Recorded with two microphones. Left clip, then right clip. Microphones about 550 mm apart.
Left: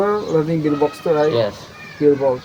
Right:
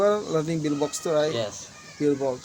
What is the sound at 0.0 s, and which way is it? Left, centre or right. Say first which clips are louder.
Speech: left 5 dB; right.